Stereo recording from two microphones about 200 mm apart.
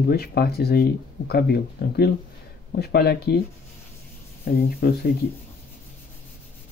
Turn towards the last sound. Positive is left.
turn(degrees=50)  # may be behind; listen again after turning